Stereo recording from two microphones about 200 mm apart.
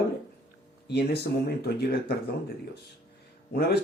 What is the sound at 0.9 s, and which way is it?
Speech, 55° left (ahead or behind).